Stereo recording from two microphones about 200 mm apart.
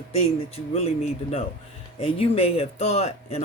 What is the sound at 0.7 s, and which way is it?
Speech, 30° left (ahead or behind).